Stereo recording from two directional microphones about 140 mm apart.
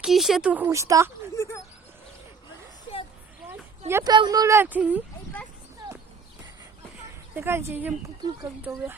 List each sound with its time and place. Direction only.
0.0 s speech: centre (ahead or behind)
0.7 s speech: 20° right (ahead or behind)
1.4 s a sound: 20° left (ahead or behind)
3.5 s a sound: 15° right (ahead or behind)
4.0 s speech: 30° right (ahead or behind); by 5.0 s 10° right (ahead or behind)
7.3 s speech: 15° right (ahead or behind)